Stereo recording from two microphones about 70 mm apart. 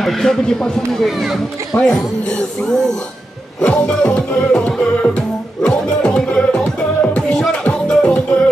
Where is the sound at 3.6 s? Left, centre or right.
Centre.